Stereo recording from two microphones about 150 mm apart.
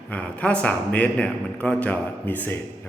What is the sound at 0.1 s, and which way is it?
A man's voice, 10° left (ahead or behind).